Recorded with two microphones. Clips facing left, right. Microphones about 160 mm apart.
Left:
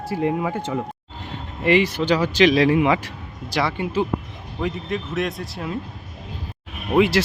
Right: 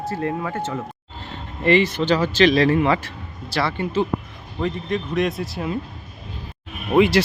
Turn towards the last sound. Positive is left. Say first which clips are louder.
# right 2 dB
turn(degrees=0)  # may be behind; listen again after turning